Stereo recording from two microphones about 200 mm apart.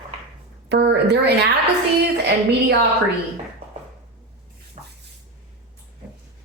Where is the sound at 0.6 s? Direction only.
55° right (ahead or behind).